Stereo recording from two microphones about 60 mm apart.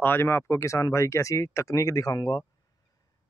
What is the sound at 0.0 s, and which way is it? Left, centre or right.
Speech, left.